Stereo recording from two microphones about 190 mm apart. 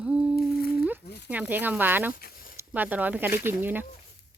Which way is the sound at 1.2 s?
5° right (ahead or behind).